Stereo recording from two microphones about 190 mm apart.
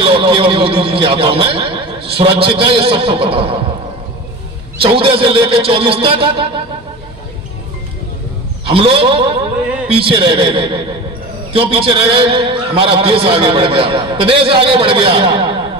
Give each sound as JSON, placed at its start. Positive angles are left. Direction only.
{"t": 0.0, "sound": "a man's voice", "side_deg": -25}
{"t": 4.8, "sound": "a man's voice", "side_deg": -30}
{"t": 8.6, "sound": "a man's voice", "side_deg": -30}